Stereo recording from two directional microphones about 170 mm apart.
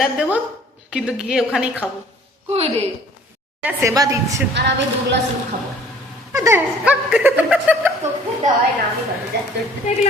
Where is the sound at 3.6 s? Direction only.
20° right (ahead or behind).